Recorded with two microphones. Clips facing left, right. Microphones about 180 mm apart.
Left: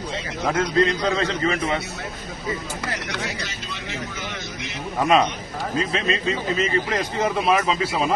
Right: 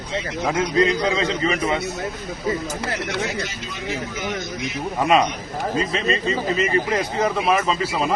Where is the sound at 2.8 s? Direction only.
25° right (ahead or behind).